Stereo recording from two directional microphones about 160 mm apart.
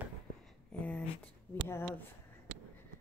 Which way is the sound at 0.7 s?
10° left (ahead or behind).